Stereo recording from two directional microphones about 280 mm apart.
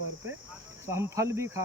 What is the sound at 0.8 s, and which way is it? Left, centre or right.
Speech, centre.